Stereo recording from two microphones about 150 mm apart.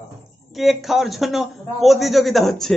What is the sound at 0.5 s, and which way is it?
A man's voice, centre (ahead or behind).